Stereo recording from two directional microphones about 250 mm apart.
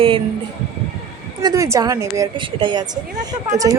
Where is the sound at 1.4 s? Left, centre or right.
Centre.